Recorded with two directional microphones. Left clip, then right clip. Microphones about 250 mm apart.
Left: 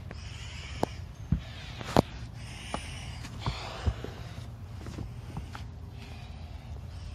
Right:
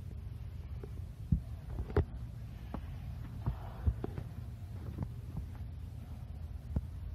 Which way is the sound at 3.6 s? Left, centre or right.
Left.